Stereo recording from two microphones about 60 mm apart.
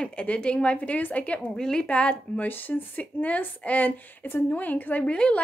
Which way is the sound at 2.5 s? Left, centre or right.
Left.